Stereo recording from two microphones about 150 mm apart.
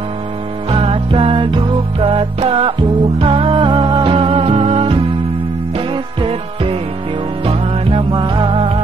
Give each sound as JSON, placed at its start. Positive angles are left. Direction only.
{"t": 0.7, "sound": "music", "side_deg": -40}